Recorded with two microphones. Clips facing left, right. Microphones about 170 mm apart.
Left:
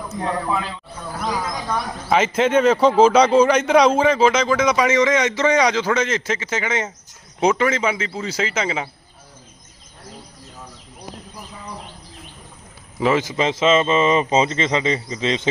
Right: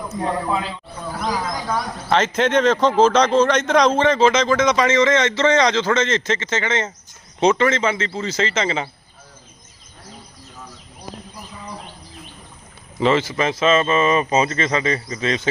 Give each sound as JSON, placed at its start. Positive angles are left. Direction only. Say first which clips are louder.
{"t": 0.2, "sound": "speech", "louder": "right 1 dB", "side_deg": -10}
{"t": 1.3, "sound": "speech", "louder": "even", "side_deg": 5}
{"t": 13.0, "sound": "speech", "louder": "right 1 dB", "side_deg": 5}
{"t": 13.2, "sound": "speech", "louder": "left 1 dB", "side_deg": 20}